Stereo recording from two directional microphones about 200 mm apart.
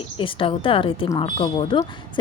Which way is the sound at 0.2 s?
25° left (ahead or behind).